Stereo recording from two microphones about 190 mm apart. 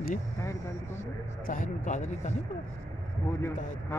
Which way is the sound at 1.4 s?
45° left (ahead or behind).